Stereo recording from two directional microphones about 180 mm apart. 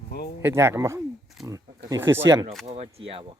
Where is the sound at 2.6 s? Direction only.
35° right (ahead or behind).